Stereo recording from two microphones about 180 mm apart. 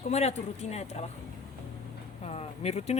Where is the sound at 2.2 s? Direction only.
35° left (ahead or behind).